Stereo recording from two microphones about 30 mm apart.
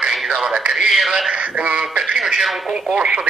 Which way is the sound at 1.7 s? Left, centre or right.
Right.